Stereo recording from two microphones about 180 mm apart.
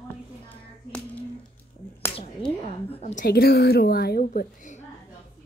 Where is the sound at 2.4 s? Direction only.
30° left (ahead or behind).